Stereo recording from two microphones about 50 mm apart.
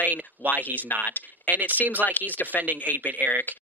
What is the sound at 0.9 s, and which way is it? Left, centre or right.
Speech, left.